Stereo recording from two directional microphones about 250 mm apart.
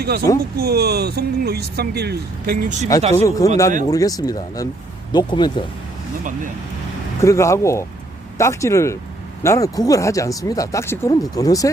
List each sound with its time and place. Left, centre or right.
0.0 s speech: right
3.2 s speech: centre
7.2 s speech: centre